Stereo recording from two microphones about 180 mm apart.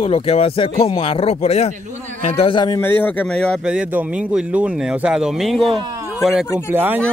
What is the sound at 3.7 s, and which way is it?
A man's voice, 5° right (ahead or behind).